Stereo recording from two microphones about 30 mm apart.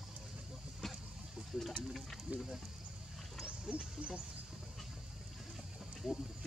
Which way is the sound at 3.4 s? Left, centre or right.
Right.